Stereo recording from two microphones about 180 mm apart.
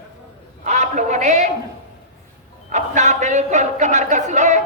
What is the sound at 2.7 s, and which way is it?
Speech, 40° right (ahead or behind).